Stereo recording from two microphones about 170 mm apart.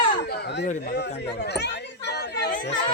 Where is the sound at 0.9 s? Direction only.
70° left (ahead or behind).